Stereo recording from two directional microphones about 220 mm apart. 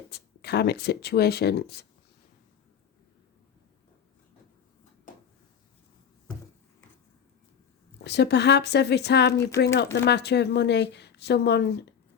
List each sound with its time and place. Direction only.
0.1 s speech: 50° left (ahead or behind)
8.0 s speech: 50° left (ahead or behind)